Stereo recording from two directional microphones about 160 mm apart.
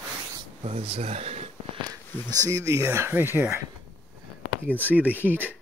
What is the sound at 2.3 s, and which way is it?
Speech, 20° right (ahead or behind).